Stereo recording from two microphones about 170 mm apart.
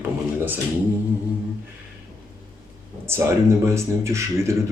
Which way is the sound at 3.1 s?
15° right (ahead or behind).